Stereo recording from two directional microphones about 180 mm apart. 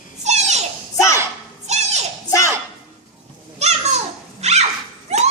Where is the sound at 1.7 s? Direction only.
40° right (ahead or behind).